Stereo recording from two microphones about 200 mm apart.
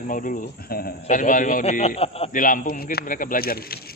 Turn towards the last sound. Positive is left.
turn(degrees=50)  # may be behind; listen again after turning